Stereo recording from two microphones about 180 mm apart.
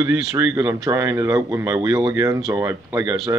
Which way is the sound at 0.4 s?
15° right (ahead or behind).